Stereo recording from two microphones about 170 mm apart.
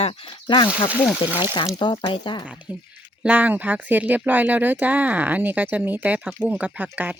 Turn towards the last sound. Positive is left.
turn(degrees=-10)  # may be behind; listen again after turning